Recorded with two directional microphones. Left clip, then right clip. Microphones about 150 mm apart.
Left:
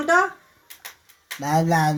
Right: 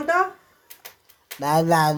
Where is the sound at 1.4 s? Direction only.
20° right (ahead or behind).